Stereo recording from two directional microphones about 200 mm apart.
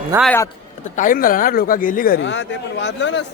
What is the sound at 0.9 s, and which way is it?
Speech, 45° left (ahead or behind).